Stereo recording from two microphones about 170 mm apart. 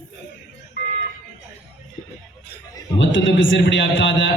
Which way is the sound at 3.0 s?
90° left.